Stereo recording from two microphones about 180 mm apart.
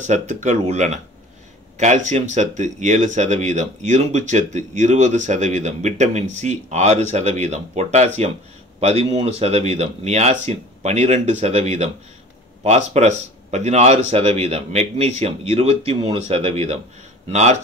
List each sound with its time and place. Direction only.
0.0 s speech: 40° right (ahead or behind)